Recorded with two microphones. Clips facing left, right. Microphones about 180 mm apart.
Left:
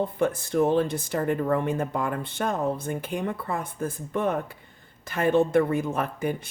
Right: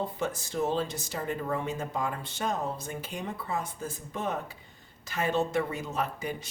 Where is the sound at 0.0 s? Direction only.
55° left (ahead or behind).